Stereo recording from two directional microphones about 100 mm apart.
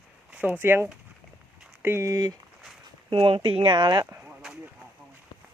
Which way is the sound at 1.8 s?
25° right (ahead or behind).